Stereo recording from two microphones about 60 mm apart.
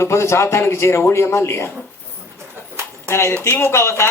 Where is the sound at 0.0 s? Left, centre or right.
Left.